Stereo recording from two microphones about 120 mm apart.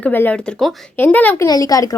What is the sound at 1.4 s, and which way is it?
Speech, 30° left (ahead or behind).